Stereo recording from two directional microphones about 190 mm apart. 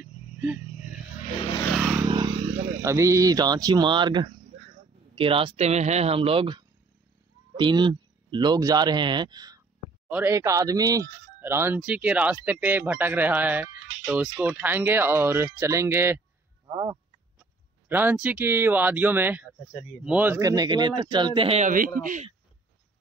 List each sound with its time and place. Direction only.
0.7 s vehicle: 40° left (ahead or behind)
1.8 s vehicle: 5° right (ahead or behind)
2.0 s vehicle: 25° right (ahead or behind)
2.8 s speech: 15° right (ahead or behind); by 22.3 s 45° right (ahead or behind)